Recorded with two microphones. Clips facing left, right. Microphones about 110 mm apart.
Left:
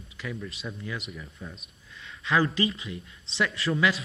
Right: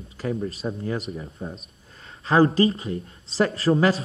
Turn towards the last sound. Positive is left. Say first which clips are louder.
# right 6 dB
turn(degrees=-35)  # may be behind; listen again after turning